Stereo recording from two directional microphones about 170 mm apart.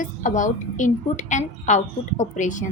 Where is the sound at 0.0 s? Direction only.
50° left (ahead or behind).